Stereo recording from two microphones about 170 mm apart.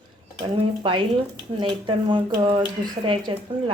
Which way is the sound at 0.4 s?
25° right (ahead or behind).